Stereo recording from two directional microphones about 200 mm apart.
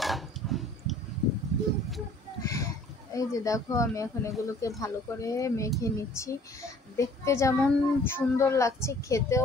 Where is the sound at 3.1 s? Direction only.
15° left (ahead or behind).